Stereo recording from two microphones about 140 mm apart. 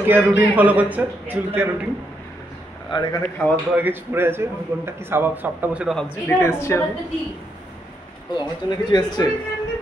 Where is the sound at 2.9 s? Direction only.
30° left (ahead or behind).